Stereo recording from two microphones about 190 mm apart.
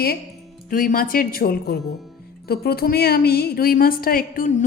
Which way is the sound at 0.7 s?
45° left (ahead or behind).